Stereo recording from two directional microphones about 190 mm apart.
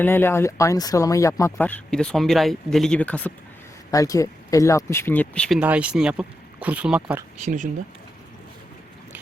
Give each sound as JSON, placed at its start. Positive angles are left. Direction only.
{"t": 0.0, "sound": "speech", "side_deg": 10}
{"t": 3.9, "sound": "speech", "side_deg": 20}
{"t": 5.5, "sound": "speech", "side_deg": -5}
{"t": 7.4, "sound": "speech", "side_deg": -40}